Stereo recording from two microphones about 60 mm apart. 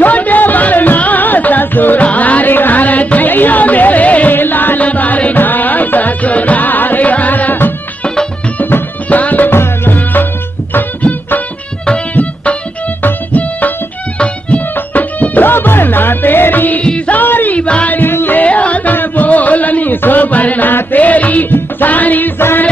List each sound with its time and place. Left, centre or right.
0.0 s music: left
13.0 s music: left
16.8 s music: centre
17.1 s a sound: left
17.6 s music: centre
17.9 s music: left